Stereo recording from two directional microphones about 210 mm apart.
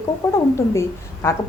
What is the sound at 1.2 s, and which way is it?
Speech, 10° left (ahead or behind).